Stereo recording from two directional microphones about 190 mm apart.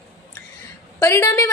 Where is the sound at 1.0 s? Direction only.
15° left (ahead or behind).